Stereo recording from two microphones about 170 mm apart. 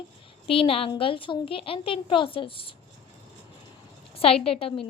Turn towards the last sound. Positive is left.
turn(degrees=35)  # may be behind; listen again after turning